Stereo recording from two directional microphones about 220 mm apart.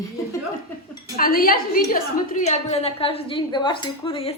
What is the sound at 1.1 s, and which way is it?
A woman's voice, 40° left (ahead or behind).